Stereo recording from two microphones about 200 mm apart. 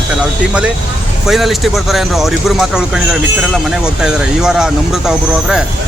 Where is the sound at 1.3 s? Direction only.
Centre (ahead or behind).